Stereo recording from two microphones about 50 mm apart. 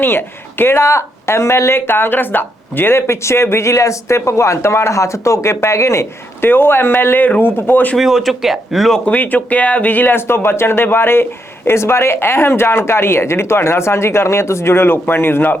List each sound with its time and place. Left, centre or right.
0.0 s speech: left
0.8 s a man's voice: left
3.1 s speech: left
5.5 s speech: left
6.4 s speech: left
7.9 s speech: centre
9.0 s speech: left
10.2 s a man's voice: left